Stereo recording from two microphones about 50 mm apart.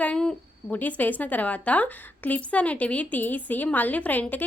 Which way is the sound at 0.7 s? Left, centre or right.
Left.